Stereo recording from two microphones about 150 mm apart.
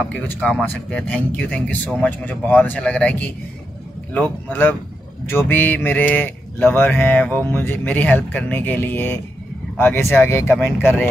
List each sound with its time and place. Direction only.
0.1 s mantra: 5° left (ahead or behind)